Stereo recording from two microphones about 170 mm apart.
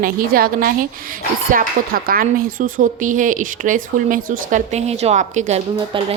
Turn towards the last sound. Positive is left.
turn(degrees=-40)  # may be behind; listen again after turning